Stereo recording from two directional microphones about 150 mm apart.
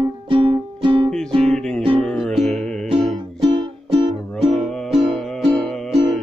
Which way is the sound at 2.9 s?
30° right (ahead or behind).